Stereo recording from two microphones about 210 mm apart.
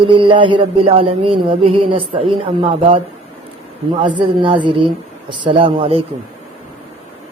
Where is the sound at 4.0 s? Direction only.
20° right (ahead or behind).